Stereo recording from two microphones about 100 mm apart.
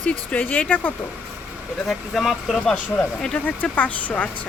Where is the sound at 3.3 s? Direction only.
15° left (ahead or behind).